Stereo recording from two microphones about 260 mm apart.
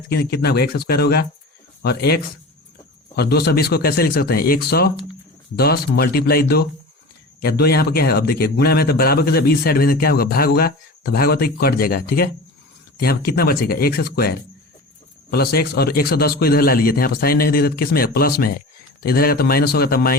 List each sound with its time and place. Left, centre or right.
0.1 s speech: left